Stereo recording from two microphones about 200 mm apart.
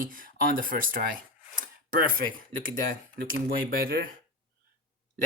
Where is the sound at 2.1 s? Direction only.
45° right (ahead or behind).